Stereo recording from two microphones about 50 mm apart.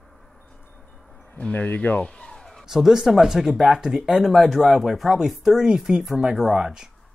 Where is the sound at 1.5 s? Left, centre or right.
Left.